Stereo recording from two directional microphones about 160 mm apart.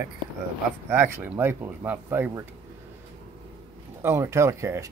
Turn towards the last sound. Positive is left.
turn(degrees=-20)  # may be behind; listen again after turning